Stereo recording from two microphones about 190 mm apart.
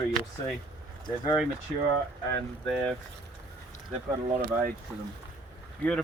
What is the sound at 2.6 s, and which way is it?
Speech, centre (ahead or behind).